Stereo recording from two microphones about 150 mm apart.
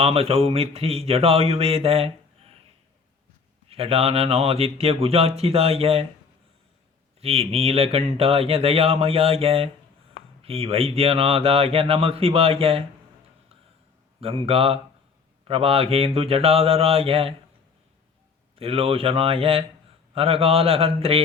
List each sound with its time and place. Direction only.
0.0 s speech: 40° right (ahead or behind)
3.7 s speech: 40° right (ahead or behind)
7.2 s speech: 40° right (ahead or behind)
14.2 s speech: 40° right (ahead or behind)
18.5 s speech: 40° right (ahead or behind)